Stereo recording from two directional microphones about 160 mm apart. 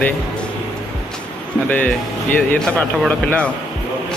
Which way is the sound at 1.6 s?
10° left (ahead or behind).